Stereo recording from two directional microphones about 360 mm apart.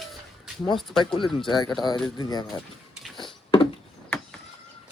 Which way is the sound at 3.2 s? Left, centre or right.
Centre.